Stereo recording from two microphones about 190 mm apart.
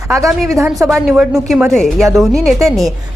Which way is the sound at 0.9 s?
Centre (ahead or behind).